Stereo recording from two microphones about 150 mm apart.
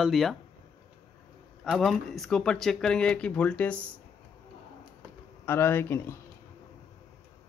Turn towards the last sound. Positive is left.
turn(degrees=15)  # may be behind; listen again after turning